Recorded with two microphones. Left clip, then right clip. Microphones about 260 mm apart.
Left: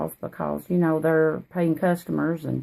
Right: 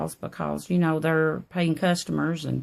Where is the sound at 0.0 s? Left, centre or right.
Right.